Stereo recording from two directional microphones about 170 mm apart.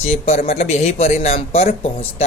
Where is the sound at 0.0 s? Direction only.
35° left (ahead or behind).